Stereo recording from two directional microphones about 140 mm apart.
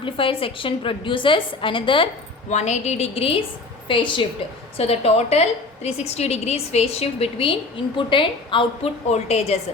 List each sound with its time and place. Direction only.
0.0 s a woman's voice: 40° left (ahead or behind)
2.5 s a woman's voice: 55° left (ahead or behind)
3.8 s a woman's voice: 35° left (ahead or behind)
9.0 s a woman's voice: 50° left (ahead or behind)